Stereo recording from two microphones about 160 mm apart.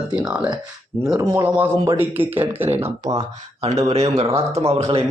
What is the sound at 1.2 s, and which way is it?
Speech, 15° right (ahead or behind).